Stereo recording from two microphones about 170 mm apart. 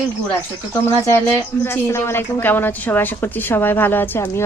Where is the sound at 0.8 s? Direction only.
15° left (ahead or behind).